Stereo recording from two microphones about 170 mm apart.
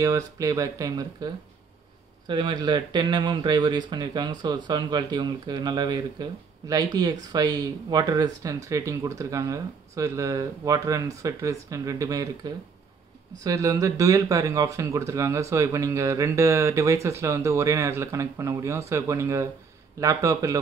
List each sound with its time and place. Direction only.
0.0 s speech: 20° right (ahead or behind)